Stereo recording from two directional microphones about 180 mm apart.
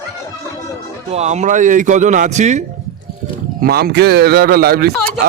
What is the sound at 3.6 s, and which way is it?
Speech, 60° right (ahead or behind).